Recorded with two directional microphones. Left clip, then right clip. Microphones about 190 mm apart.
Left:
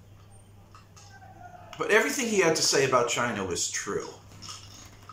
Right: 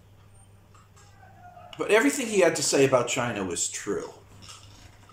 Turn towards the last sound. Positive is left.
turn(degrees=-15)  # may be behind; listen again after turning